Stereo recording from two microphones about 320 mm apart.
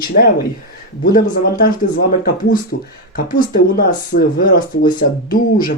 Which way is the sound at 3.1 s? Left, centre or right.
Left.